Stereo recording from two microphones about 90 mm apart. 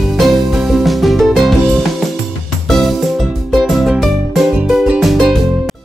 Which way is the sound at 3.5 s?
Centre (ahead or behind).